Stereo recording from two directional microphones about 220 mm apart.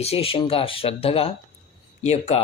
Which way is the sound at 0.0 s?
25° left (ahead or behind).